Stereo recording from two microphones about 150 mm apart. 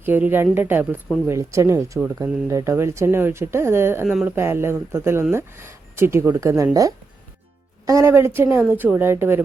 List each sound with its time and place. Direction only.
0.0 s speech: 10° right (ahead or behind)
4.0 s speech: 5° right (ahead or behind)
4.4 s speech: 15° right (ahead or behind)
7.9 s speech: 20° right (ahead or behind)